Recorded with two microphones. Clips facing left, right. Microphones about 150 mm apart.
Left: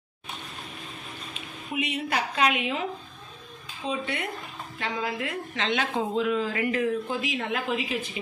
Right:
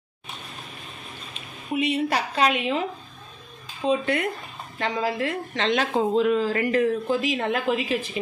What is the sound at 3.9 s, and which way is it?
Speech, 50° right (ahead or behind).